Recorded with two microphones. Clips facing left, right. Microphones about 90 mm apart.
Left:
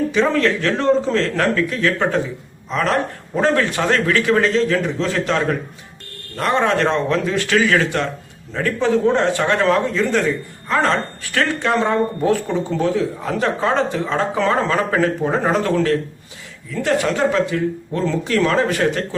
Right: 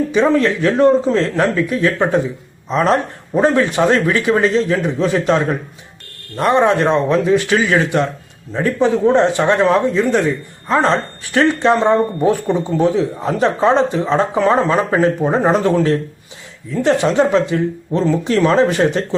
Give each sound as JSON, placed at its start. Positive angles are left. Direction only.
{"t": 0.1, "sound": "a man's voice", "side_deg": -20}